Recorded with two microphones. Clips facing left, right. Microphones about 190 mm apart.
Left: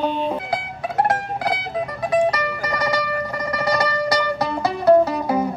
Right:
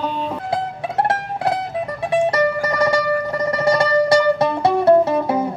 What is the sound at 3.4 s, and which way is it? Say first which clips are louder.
Music: right 4 dB; 25° right (ahead or behind).